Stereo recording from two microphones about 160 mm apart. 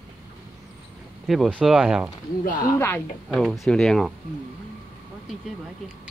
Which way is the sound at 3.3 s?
Centre (ahead or behind).